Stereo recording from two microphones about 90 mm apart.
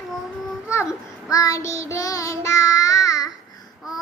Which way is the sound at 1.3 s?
40° left (ahead or behind).